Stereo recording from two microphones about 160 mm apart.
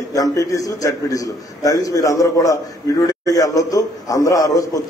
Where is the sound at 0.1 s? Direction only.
20° left (ahead or behind).